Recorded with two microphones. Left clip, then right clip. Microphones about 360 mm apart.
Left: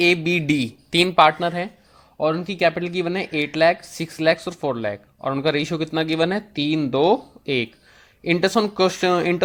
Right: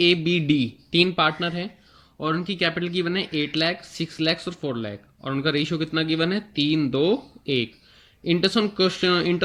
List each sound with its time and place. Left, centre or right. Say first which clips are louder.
0.0 s speech: left 2 dB; centre